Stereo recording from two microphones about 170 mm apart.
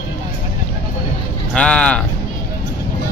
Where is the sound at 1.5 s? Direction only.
5° left (ahead or behind).